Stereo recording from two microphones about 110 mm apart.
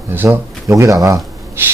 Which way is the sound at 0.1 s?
20° right (ahead or behind).